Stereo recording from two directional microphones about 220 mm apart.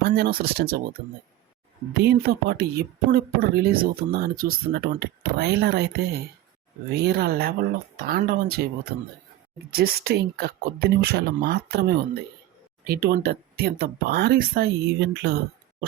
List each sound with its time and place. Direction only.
0.0 s speech: 45° right (ahead or behind)
6.9 s speech: 45° right (ahead or behind)